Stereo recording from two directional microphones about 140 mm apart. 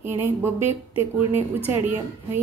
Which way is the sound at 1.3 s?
15° right (ahead or behind).